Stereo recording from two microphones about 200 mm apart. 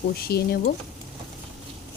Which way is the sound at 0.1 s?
50° left (ahead or behind).